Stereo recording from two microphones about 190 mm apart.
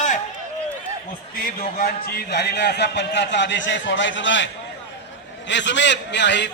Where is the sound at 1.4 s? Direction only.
50° left (ahead or behind); by 4.4 s 75° left (ahead or behind).